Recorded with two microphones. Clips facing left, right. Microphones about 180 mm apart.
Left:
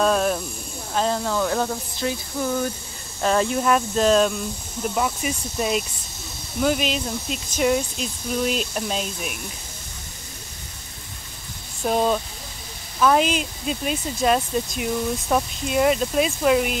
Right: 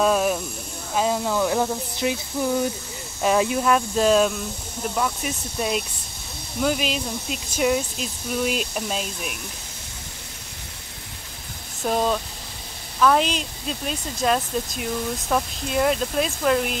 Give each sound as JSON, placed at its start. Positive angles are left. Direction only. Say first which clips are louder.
{"t": 0.0, "sound": "speech", "louder": "even", "side_deg": -5}
{"t": 11.8, "sound": "speech", "louder": "left 2 dB", "side_deg": 5}